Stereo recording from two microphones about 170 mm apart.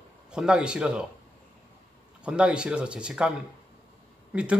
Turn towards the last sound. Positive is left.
turn(degrees=-5)  # may be behind; listen again after turning